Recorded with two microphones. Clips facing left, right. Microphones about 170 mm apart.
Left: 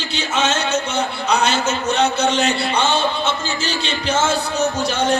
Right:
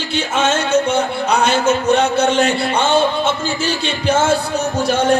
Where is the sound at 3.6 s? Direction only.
55° right (ahead or behind).